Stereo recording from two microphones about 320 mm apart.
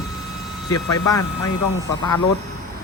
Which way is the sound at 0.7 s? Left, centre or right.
Left.